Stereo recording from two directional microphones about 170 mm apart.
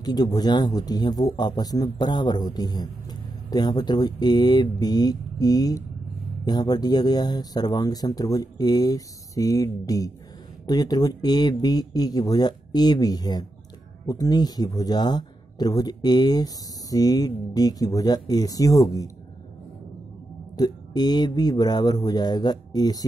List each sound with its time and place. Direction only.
0.0 s speech: 25° left (ahead or behind)
20.5 s speech: 25° left (ahead or behind)